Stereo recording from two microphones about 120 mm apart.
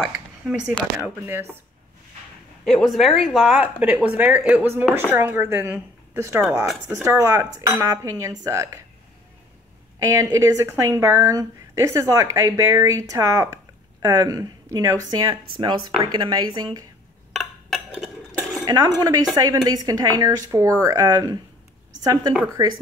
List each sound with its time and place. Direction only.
0.9 s a woman's voice: 20° right (ahead or behind)
2.6 s a woman's voice: 5° left (ahead or behind); by 8.8 s 25° right (ahead or behind)
10.0 s a woman's voice: 25° right (ahead or behind)
17.6 s dishes: centre (ahead or behind)
18.7 s a woman's voice: 30° right (ahead or behind)